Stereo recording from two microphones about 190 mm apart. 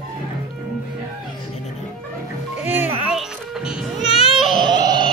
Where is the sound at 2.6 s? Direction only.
10° right (ahead or behind).